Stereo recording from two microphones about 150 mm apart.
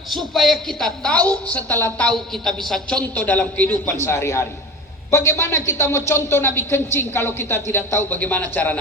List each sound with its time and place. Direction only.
0.3 s a woman's voice: centre (ahead or behind)